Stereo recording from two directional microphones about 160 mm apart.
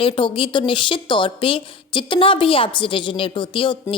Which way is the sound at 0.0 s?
30° left (ahead or behind).